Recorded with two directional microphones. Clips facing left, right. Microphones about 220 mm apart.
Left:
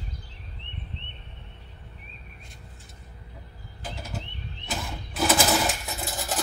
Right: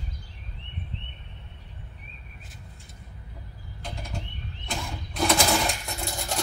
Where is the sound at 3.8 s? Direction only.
5° left (ahead or behind).